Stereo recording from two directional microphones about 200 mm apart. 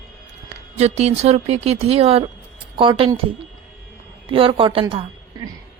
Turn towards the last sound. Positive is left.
turn(degrees=-25)  # may be behind; listen again after turning